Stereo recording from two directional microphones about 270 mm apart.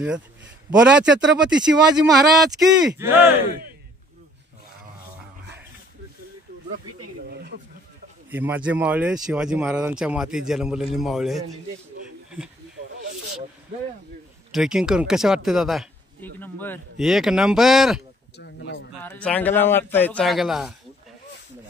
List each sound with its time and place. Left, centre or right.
0.7 s speech: centre
7.2 s a sound: right
8.3 s speech: centre
14.5 s speech: centre
18.4 s a sound: left
18.9 s speech: centre